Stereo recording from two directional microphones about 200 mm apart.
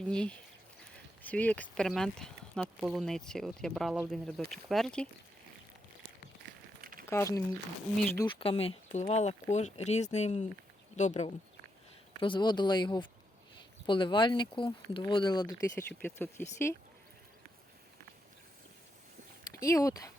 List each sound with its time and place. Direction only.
0.0 s speech: 5° left (ahead or behind)
7.1 s speech: 15° left (ahead or behind)
8.2 s speech: 25° left (ahead or behind)
12.2 s speech: 25° left (ahead or behind)
16.0 s speech: 10° left (ahead or behind)
19.5 s speech: 15° left (ahead or behind)